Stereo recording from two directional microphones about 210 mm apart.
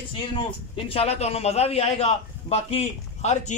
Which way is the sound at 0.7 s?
25° left (ahead or behind).